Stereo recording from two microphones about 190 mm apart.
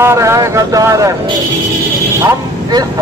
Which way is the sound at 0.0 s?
15° right (ahead or behind).